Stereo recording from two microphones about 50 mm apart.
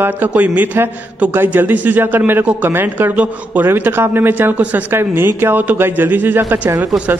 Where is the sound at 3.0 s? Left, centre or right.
Right.